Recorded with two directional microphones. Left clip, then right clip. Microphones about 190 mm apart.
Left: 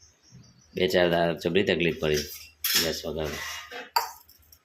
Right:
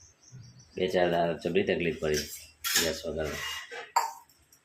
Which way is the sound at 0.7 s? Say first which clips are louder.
Left 4 dB; 25° left (ahead or behind).